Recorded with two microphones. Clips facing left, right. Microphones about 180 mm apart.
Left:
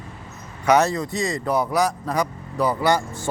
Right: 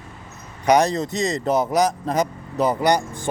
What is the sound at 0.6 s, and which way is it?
Speech, 15° right (ahead or behind).